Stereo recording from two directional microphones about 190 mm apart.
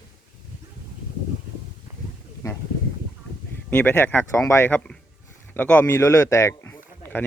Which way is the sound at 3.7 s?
10° left (ahead or behind).